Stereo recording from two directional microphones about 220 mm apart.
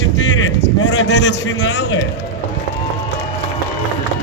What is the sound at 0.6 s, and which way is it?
A man's voice, 55° left (ahead or behind).